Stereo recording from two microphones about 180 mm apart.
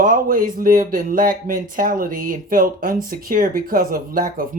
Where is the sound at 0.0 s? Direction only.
50° right (ahead or behind).